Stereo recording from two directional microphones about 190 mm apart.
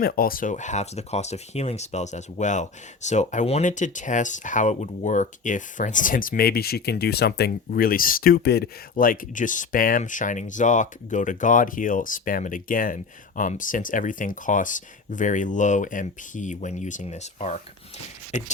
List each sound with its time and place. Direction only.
0.0 s speech: 50° left (ahead or behind)